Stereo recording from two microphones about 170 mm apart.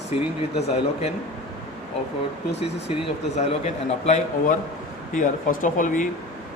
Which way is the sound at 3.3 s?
40° left (ahead or behind).